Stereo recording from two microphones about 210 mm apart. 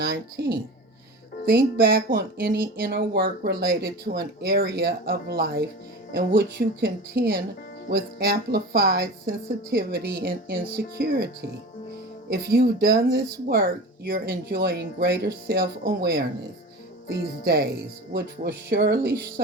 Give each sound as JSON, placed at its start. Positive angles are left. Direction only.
{"t": 0.0, "sound": "speech", "side_deg": -50}
{"t": 12.5, "sound": "speech", "side_deg": -45}
{"t": 17.4, "sound": "speech", "side_deg": -50}